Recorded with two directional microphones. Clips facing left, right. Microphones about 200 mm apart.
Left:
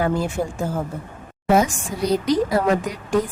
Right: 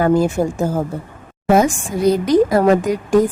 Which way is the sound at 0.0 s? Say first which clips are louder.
Right 7 dB; 45° right (ahead or behind).